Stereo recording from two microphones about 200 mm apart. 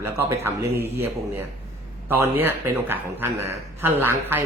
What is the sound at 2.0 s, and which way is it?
Speech, 15° right (ahead or behind).